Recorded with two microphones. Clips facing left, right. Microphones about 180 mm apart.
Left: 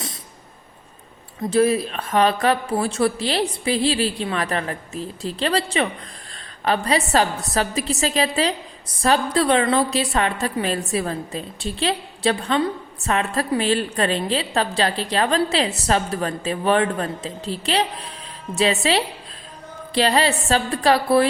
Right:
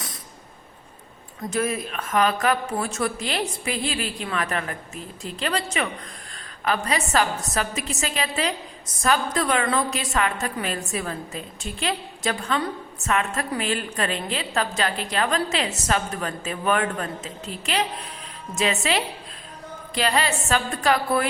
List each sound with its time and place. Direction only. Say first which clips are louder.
1.5 s a woman's voice: left 8 dB; 30° left (ahead or behind)